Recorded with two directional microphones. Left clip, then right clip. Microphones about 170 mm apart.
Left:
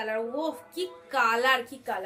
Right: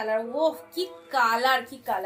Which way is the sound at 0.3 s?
20° left (ahead or behind).